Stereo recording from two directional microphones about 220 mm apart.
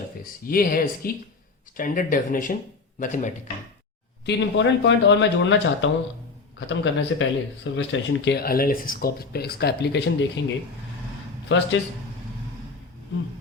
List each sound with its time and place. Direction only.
0.4 s speech: 40° left (ahead or behind)
4.3 s speech: 55° left (ahead or behind)
11.4 s speech: 55° left (ahead or behind)